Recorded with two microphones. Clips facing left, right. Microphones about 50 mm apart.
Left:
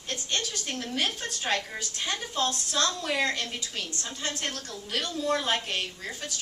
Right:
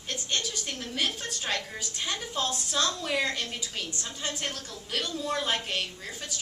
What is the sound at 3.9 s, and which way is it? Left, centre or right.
A woman's voice, centre.